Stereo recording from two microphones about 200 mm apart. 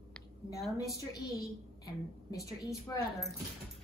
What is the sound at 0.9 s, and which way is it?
A woman's voice, 15° left (ahead or behind).